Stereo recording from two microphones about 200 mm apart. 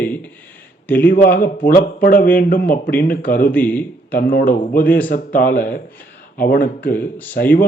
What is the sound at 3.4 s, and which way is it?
Speech, 10° left (ahead or behind).